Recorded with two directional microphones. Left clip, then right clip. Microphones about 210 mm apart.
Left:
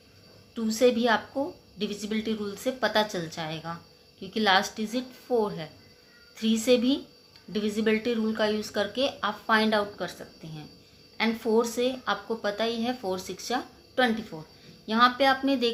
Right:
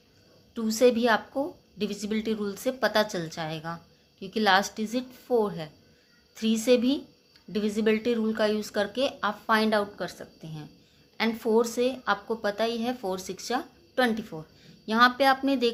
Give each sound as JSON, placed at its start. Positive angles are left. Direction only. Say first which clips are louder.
{"t": 0.5, "sound": "a woman's voice", "louder": "right 1 dB", "side_deg": -25}